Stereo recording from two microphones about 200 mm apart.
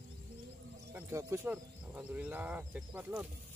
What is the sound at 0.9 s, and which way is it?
Speech, 15° right (ahead or behind).